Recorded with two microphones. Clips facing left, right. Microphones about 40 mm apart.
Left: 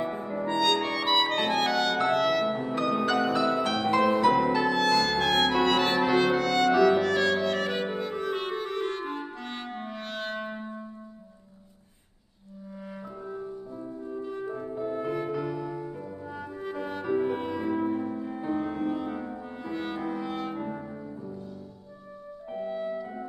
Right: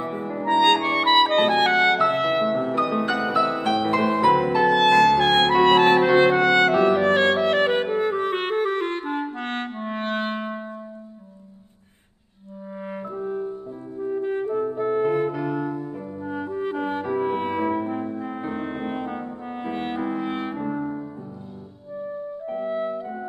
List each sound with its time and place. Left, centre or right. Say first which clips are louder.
0.0 s music: right 3 dB; right
0.5 s clarinet: right 8 dB; right
2.0 s music: right 3 dB; right
2.4 s music: right 5 dB; centre
4.6 s music: right 8 dB; right
12.9 s music: right 10 dB; right
20.5 s brass instrument: right 7 dB; right
22.5 s music: right 5 dB; right